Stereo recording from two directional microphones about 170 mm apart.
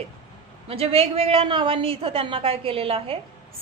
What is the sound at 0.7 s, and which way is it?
A woman's voice, 35° right (ahead or behind).